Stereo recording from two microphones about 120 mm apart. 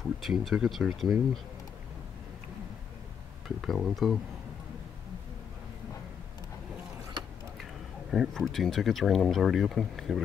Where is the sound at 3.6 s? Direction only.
Centre (ahead or behind).